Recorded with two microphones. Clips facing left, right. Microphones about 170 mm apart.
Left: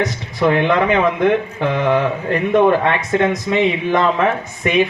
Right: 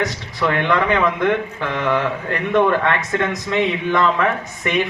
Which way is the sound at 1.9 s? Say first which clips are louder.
Left 1 dB; 10° left (ahead or behind).